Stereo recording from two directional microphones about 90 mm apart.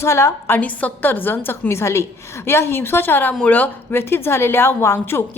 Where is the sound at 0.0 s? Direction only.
30° left (ahead or behind).